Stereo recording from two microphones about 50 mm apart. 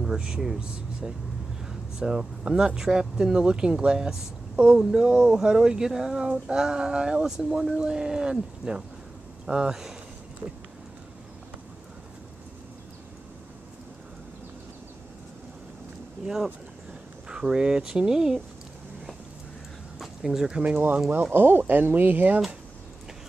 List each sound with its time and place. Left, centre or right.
0.0 s speech: centre
10.4 s speech: right
17.3 s speech: centre
20.0 s speech: centre
20.7 s speech: right